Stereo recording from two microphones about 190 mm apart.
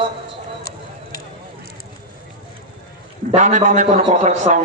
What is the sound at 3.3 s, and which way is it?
A man's voice, 35° right (ahead or behind).